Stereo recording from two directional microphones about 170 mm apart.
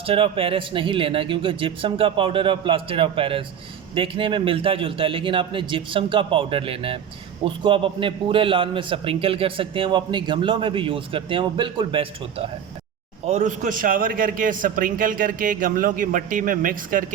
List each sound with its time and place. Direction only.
0.0 s a man's voice: 35° right (ahead or behind)
13.2 s a man's voice: 45° right (ahead or behind)